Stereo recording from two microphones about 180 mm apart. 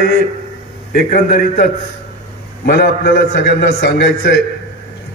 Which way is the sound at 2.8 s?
85° left.